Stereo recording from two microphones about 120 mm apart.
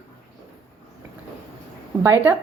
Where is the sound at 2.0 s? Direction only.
20° right (ahead or behind).